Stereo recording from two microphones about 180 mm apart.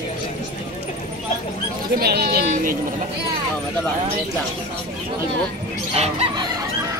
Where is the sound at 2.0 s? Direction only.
60° right (ahead or behind).